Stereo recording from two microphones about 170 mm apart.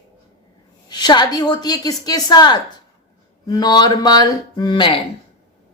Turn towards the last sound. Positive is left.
turn(degrees=25)  # may be behind; listen again after turning